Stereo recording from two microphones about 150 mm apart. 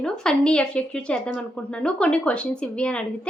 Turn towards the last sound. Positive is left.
turn(degrees=5)  # may be behind; listen again after turning